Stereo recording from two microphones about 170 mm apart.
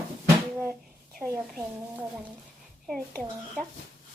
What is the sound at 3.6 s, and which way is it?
Speech, 5° left (ahead or behind).